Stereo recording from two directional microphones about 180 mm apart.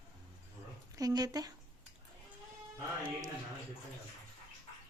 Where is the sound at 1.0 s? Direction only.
20° right (ahead or behind).